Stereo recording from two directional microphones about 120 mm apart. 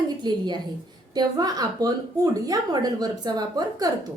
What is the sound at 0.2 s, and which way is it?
Speech, 35° right (ahead or behind).